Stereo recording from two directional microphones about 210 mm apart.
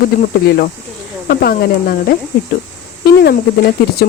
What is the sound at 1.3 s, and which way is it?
Speech, 45° left (ahead or behind).